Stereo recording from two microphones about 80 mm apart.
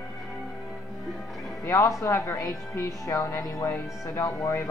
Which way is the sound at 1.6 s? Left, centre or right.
Left.